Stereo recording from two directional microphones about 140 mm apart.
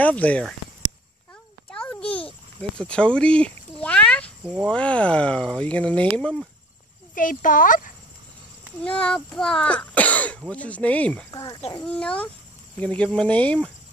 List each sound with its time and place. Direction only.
0.0 s speech: 10° left (ahead or behind)
1.7 s a sound: 5° left (ahead or behind)
4.4 s speech: 5° right (ahead or behind)
4.6 s speech: 10° left (ahead or behind)
7.2 s speech: 75° left (ahead or behind)
8.8 s speech: 10° left (ahead or behind)
11.3 s speech: 35° left (ahead or behind)
11.8 s speech: 10° left (ahead or behind)